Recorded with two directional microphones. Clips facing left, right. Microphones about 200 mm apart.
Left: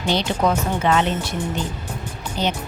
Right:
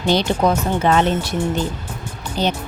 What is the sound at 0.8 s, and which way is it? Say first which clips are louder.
Speech: right 3 dB; 40° right (ahead or behind).